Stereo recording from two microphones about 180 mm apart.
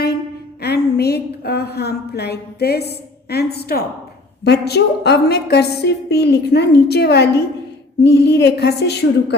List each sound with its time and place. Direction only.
0.6 s a woman's voice: 65° left (ahead or behind)